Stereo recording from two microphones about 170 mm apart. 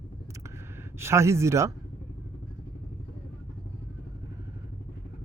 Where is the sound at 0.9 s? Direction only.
15° right (ahead or behind).